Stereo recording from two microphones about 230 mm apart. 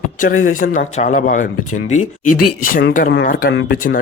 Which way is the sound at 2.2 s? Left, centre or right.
Left.